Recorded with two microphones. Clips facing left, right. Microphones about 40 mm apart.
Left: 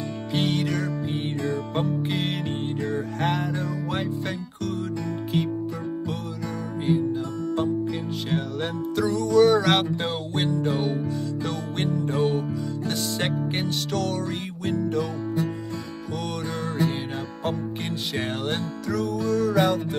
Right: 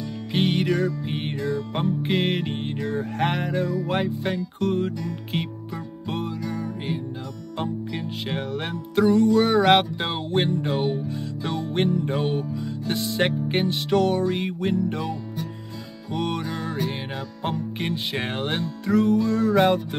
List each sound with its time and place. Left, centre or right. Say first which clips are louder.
0.3 s music: right 3 dB; right
8.9 s music: right 3 dB; right
16.1 s music: right 4 dB; right